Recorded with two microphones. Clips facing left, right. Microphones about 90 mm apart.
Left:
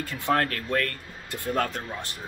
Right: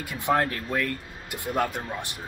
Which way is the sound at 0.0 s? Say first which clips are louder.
Right 1 dB; 15° right (ahead or behind).